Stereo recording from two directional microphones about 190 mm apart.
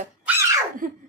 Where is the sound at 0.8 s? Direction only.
45° right (ahead or behind).